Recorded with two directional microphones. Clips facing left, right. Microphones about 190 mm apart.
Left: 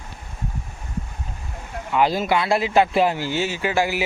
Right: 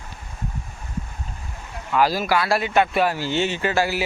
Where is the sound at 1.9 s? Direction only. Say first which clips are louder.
Even; 20° left (ahead or behind).